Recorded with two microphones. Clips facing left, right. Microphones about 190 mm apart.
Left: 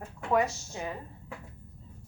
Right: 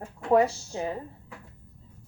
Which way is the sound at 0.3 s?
30° right (ahead or behind).